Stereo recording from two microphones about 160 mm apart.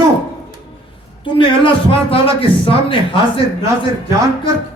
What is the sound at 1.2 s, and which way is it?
A man's voice, 30° left (ahead or behind).